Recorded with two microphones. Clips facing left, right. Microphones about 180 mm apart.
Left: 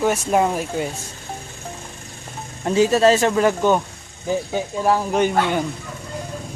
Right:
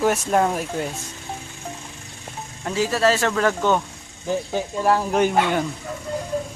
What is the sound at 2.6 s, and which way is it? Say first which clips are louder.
Speech: left 5 dB; 20° left (ahead or behind).